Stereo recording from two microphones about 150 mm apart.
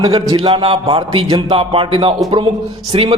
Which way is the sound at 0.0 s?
35° right (ahead or behind).